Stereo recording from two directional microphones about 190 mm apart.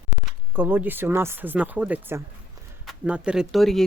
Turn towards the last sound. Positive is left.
turn(degrees=0)  # may be behind; listen again after turning